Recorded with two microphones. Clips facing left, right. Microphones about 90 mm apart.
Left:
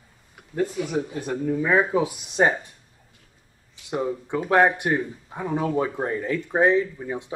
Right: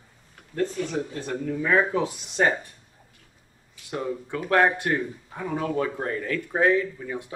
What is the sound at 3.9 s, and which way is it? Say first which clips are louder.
Speech: left 3 dB; 20° left (ahead or behind).